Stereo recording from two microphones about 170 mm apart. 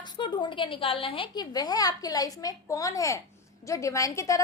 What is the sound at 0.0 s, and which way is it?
A woman's voice, 25° left (ahead or behind).